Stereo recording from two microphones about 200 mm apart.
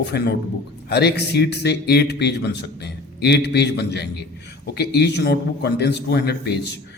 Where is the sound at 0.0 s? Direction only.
55° left (ahead or behind).